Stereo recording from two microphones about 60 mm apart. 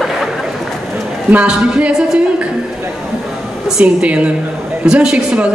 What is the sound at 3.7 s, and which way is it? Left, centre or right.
A woman's voice, centre.